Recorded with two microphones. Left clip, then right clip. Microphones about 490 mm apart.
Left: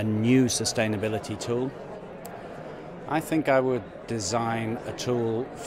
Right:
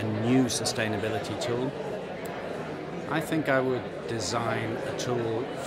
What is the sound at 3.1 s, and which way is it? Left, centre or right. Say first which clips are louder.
Speech: left 3 dB; left.